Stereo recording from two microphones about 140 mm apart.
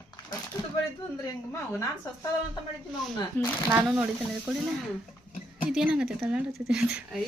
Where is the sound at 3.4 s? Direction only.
15° left (ahead or behind).